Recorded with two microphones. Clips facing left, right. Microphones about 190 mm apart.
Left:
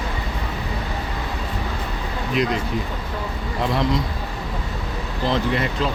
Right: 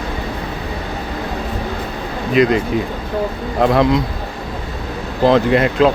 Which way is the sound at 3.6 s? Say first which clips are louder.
Right 9 dB; 50° right (ahead or behind).